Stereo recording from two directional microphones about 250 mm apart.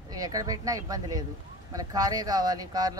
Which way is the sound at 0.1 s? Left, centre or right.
Centre.